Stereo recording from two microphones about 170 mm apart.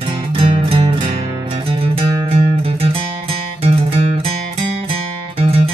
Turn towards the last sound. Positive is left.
turn(degrees=-35)  # may be behind; listen again after turning